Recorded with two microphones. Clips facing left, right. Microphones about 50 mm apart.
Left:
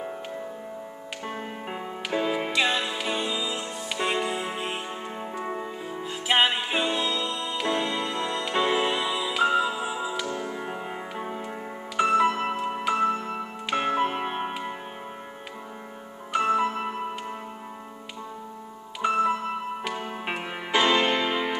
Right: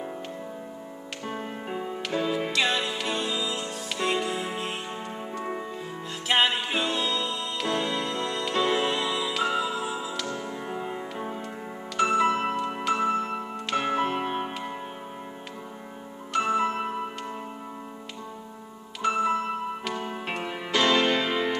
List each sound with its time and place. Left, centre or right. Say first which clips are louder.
1.2 s music: even; centre
16.3 s music: left 1 dB; centre
19.0 s music: left 1 dB; centre